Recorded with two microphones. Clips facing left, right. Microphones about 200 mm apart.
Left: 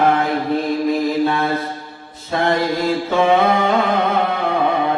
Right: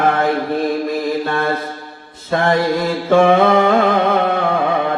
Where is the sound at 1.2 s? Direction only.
55° right (ahead or behind).